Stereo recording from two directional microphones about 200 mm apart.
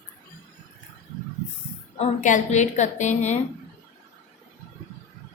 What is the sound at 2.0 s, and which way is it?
A woman's voice, 40° left (ahead or behind).